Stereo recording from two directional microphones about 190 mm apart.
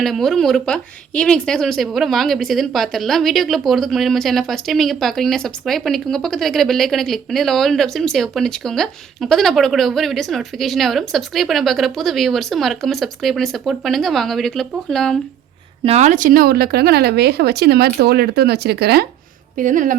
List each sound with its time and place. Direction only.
0.0 s a woman's voice: centre (ahead or behind)
15.8 s speech: 35° right (ahead or behind); by 19.0 s 55° right (ahead or behind)
19.5 s speech: 45° right (ahead or behind)